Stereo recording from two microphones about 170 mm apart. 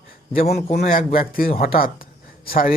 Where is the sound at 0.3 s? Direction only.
65° left (ahead or behind).